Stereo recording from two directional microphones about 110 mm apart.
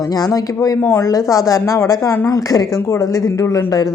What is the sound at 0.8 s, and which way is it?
Speech, 15° left (ahead or behind).